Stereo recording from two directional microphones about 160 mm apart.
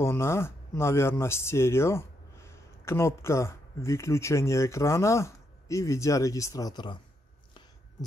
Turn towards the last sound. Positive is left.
turn(degrees=25)  # may be behind; listen again after turning